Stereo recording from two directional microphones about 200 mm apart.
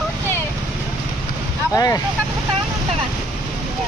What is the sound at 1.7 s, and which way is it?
Speech, 20° left (ahead or behind).